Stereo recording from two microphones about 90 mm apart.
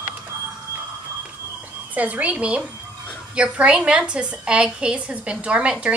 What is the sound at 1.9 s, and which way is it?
A woman's voice, 15° right (ahead or behind).